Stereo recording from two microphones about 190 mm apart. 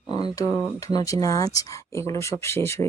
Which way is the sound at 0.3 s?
20° left (ahead or behind).